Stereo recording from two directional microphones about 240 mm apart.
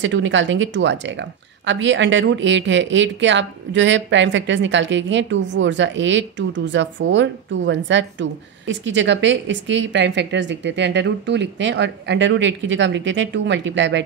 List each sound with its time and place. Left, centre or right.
0.0 s speech: right